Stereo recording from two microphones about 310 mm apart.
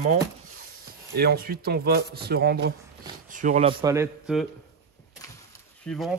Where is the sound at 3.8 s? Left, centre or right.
Centre.